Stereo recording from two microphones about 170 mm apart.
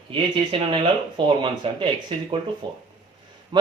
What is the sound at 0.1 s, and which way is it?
Speech, 30° right (ahead or behind).